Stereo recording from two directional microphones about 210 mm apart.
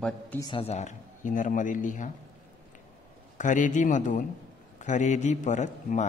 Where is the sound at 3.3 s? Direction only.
35° left (ahead or behind).